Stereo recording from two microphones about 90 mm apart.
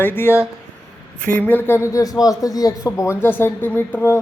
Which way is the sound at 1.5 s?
25° left (ahead or behind).